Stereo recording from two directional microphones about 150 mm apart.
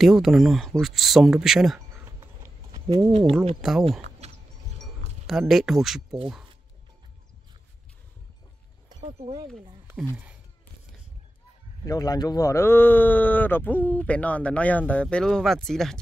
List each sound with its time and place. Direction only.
0.0 s speech: centre (ahead or behind)
2.7 s a sound: 25° right (ahead or behind)
3.1 s speech: 40° right (ahead or behind)
3.6 s speech: centre (ahead or behind)
5.2 s speech: centre (ahead or behind)
9.0 s speech: 40° right (ahead or behind)
11.8 s speech: 25° left (ahead or behind); by 16.0 s 5° left (ahead or behind)